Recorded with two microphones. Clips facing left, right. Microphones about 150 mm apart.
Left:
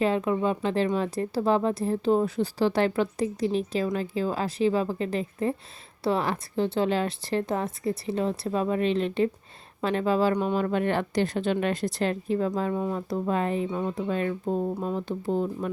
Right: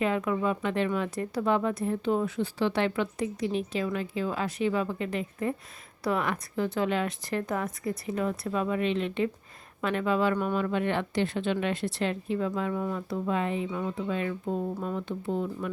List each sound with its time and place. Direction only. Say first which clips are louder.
0.0 s speech: left 3 dB; 30° left (ahead or behind)
13.7 s speech: left 3 dB; 30° left (ahead or behind)